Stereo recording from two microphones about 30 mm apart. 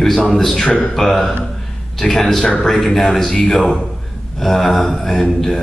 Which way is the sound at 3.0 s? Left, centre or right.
Centre.